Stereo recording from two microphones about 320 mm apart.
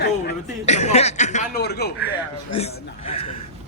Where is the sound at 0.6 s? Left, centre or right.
Left.